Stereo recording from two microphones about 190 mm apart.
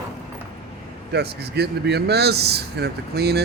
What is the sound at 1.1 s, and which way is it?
Speech, 60° right (ahead or behind).